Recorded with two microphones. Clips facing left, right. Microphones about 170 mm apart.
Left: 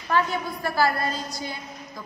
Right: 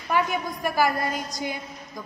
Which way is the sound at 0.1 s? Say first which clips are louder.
Even; 15° right (ahead or behind).